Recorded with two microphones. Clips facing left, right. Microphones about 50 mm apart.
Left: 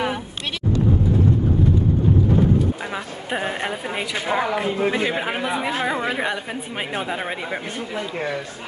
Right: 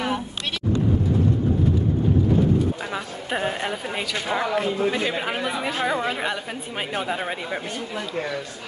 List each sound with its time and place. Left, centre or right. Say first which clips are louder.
2.9 s speech: left 1 dB; centre